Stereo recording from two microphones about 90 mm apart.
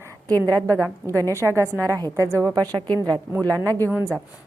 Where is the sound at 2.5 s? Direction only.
45° right (ahead or behind).